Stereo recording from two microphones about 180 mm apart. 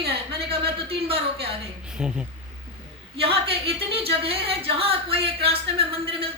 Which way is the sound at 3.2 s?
30° right (ahead or behind).